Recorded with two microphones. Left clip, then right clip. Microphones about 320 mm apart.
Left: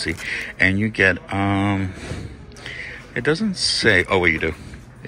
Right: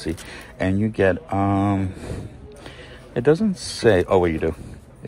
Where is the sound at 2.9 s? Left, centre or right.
Centre.